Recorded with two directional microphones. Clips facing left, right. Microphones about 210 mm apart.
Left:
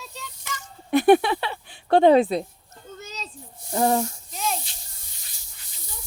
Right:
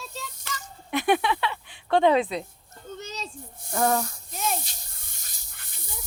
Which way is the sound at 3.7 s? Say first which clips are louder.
Left 3 dB; 25° left (ahead or behind).